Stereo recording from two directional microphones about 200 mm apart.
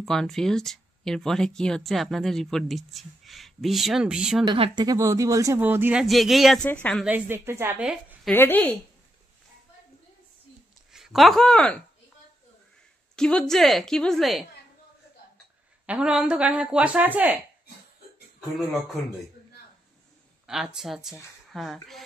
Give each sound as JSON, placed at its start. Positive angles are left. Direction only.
{"t": 0.0, "sound": "speech", "side_deg": 0}
{"t": 4.5, "sound": "speech", "side_deg": -20}
{"t": 7.1, "sound": "speech", "side_deg": -10}
{"t": 8.3, "sound": "speech", "side_deg": 10}
{"t": 10.9, "sound": "speech", "side_deg": -5}
{"t": 13.1, "sound": "speech", "side_deg": 5}
{"t": 15.9, "sound": "speech", "side_deg": -5}
{"t": 18.6, "sound": "speech", "side_deg": 0}
{"t": 20.4, "sound": "speech", "side_deg": 0}